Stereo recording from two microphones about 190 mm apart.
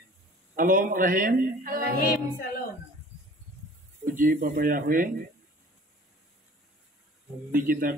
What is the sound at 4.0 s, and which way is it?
Speech, 45° right (ahead or behind).